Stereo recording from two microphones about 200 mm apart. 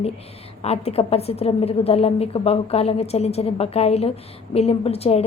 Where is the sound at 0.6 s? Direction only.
30° left (ahead or behind).